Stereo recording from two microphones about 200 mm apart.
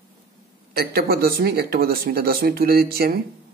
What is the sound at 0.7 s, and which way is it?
Speech, 50° right (ahead or behind).